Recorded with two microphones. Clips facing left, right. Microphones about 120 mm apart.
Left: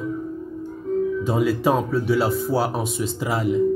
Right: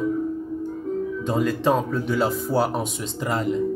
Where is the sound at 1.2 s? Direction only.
5° left (ahead or behind).